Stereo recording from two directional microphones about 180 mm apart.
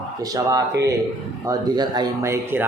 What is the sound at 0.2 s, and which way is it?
A man's voice, 20° right (ahead or behind).